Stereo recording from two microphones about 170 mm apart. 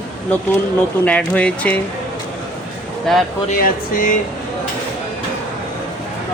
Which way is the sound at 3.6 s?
55° left (ahead or behind).